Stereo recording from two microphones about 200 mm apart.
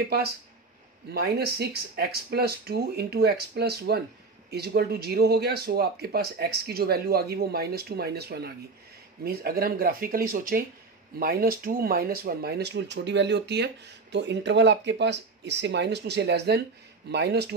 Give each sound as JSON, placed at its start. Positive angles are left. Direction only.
{"t": 1.1, "sound": "speech", "side_deg": -55}